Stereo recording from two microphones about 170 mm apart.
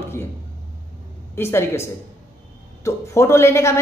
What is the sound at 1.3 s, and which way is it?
A woman's voice, 15° left (ahead or behind).